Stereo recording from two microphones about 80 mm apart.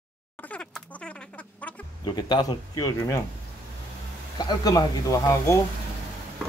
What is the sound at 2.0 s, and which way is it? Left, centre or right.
Speech, left.